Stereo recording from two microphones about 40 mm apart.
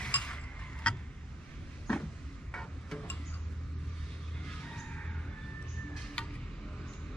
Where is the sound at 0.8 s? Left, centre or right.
Left.